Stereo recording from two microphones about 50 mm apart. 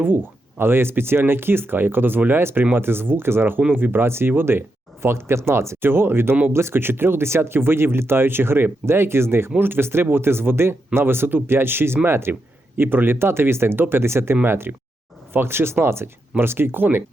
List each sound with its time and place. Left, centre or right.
0.0 s speech: right
5.0 s speech: right
9.6 s speech: right
12.3 s speech: right